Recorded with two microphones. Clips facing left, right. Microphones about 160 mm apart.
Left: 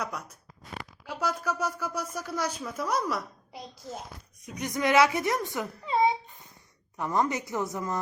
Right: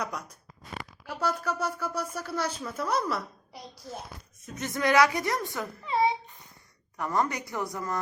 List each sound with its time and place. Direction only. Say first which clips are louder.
0.0 s speech: right 1 dB; 5° left (ahead or behind)
4.4 s speech: left 1 dB; 15° left (ahead or behind)